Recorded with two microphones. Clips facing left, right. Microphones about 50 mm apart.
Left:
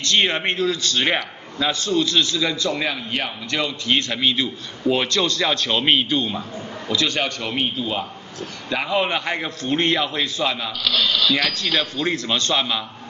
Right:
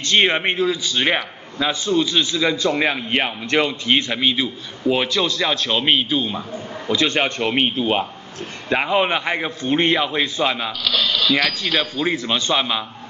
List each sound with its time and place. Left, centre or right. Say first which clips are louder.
0.0 s a man's voice: right 3 dB; right; by 6.4 s centre
6.9 s a man's voice: right 3 dB; right
8.6 s a man's voice: right 3 dB; right
10.9 s a sound: even; centre
11.5 s a man's voice: right 1 dB; centre